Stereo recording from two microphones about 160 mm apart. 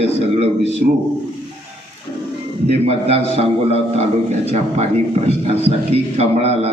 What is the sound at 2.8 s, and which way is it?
A man's voice, 40° right (ahead or behind).